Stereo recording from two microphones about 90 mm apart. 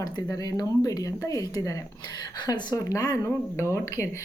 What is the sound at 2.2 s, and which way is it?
Speech, 50° left (ahead or behind).